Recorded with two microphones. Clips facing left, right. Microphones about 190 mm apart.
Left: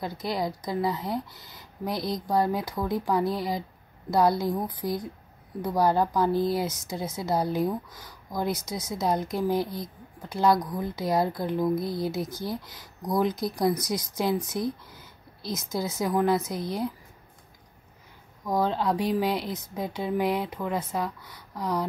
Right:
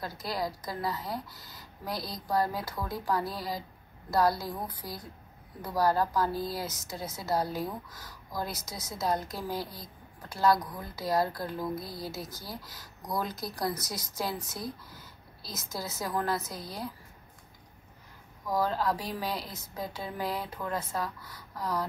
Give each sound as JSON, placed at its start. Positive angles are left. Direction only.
{"t": 0.0, "sound": "speech", "side_deg": 20}
{"t": 15.7, "sound": "speech", "side_deg": 20}
{"t": 18.4, "sound": "speech", "side_deg": 20}